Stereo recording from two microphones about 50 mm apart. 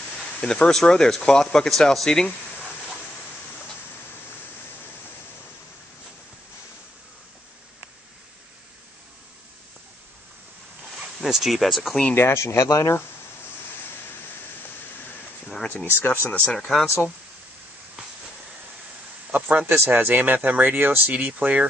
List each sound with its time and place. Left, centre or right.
0.4 s speech: centre
11.1 s speech: centre
12.2 s speech: left
15.9 s speech: left
16.3 s speech: left
16.5 s speech: centre
19.5 s speech: right